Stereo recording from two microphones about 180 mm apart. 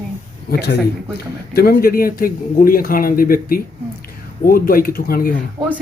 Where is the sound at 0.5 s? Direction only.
65° left (ahead or behind).